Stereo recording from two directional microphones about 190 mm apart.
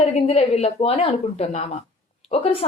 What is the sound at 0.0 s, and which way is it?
Speech, 35° left (ahead or behind).